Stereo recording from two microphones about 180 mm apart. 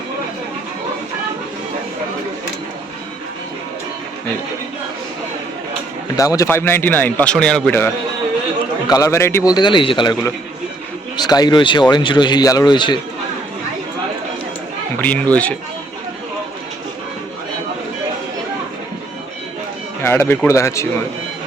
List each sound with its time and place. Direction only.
6.1 s speech: 20° left (ahead or behind)
14.9 s speech: 10° left (ahead or behind)
20.0 s speech: 10° left (ahead or behind)